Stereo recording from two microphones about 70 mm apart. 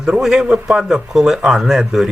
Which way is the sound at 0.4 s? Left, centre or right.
Right.